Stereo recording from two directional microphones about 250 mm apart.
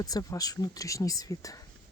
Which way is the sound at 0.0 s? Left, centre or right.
Centre.